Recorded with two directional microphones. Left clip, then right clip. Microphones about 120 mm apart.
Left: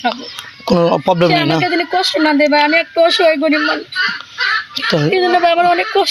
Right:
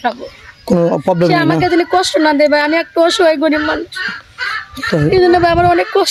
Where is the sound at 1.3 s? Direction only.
50° right (ahead or behind).